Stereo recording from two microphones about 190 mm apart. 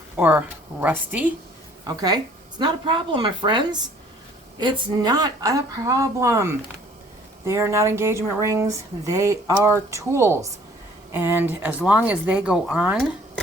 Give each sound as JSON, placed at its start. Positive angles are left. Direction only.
{"t": 0.2, "sound": "speech", "side_deg": -10}
{"t": 1.9, "sound": "speech", "side_deg": -20}